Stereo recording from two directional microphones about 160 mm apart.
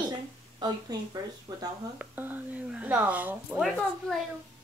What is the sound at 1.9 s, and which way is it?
Speech, 10° right (ahead or behind).